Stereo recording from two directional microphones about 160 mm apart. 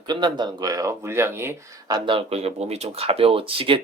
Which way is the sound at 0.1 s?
30° right (ahead or behind).